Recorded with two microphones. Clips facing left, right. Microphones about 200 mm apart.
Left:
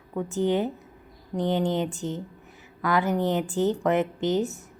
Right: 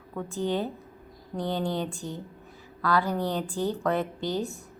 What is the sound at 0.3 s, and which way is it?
A woman's voice, 15° left (ahead or behind).